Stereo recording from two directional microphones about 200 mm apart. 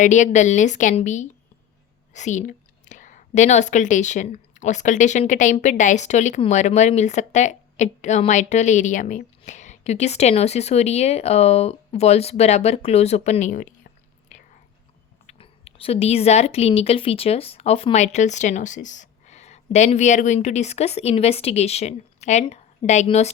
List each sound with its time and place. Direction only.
0.0 s a woman's voice: 35° left (ahead or behind)
14.3 s whispering: 40° left (ahead or behind)
15.3 s speech: 30° left (ahead or behind)